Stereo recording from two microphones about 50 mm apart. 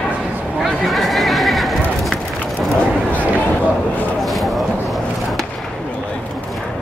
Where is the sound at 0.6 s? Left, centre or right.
Centre.